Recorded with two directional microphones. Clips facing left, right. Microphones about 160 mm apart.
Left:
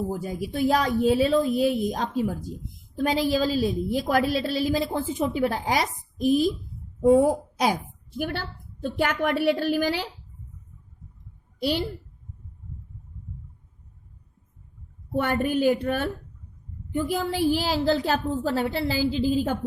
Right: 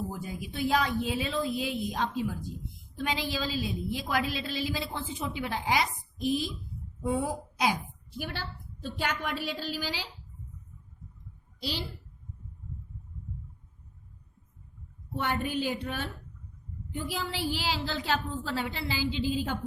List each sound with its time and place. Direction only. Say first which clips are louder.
0.1 s a woman's voice: left 8 dB; 40° left (ahead or behind); by 10.1 s 55° left (ahead or behind)
11.6 s a child's voice: left 10 dB; 55° left (ahead or behind)
15.1 s a woman's voice: left 7 dB; 50° left (ahead or behind)